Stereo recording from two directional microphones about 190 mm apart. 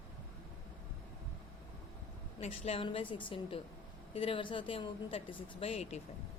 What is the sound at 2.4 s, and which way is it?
A woman's voice, 30° left (ahead or behind).